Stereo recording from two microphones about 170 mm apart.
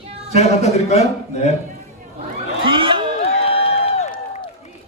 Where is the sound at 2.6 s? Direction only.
30° right (ahead or behind).